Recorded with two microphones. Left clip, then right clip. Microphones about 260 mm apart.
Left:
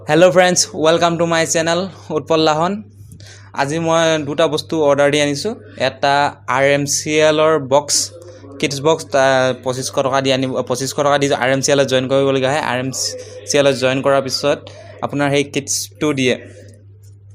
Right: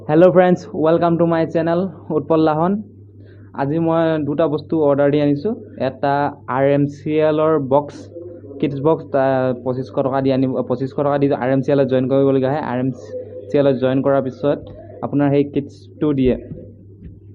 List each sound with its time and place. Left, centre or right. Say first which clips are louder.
0.1 s speech: left 1 dB; left